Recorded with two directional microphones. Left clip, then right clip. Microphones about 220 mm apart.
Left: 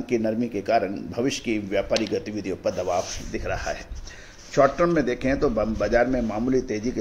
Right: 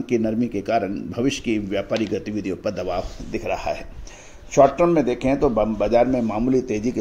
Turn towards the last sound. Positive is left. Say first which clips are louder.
# right 3 dB
turn(degrees=-30)  # may be behind; listen again after turning